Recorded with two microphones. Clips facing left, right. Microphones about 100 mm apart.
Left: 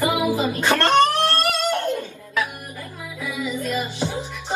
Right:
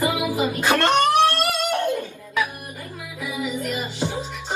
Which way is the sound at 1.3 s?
15° right (ahead or behind).